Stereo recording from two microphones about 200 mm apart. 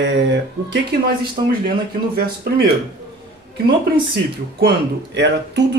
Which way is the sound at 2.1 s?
50° right (ahead or behind).